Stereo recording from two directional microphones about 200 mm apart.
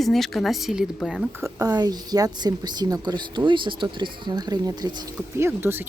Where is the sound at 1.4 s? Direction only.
15° right (ahead or behind).